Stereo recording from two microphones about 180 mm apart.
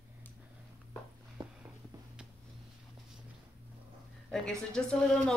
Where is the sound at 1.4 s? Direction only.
25° right (ahead or behind).